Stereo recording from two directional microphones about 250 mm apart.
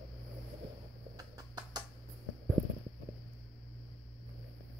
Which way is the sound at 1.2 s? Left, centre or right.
Centre.